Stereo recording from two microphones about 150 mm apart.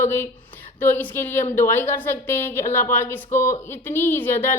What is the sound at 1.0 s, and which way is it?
A woman's voice, 15° left (ahead or behind).